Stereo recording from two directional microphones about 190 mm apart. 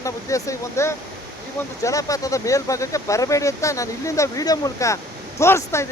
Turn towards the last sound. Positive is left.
turn(degrees=15)  # may be behind; listen again after turning